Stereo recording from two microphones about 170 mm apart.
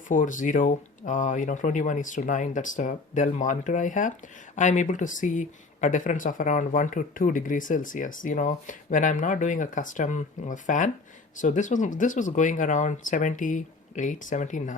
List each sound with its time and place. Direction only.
0.1 s speech: 50° left (ahead or behind)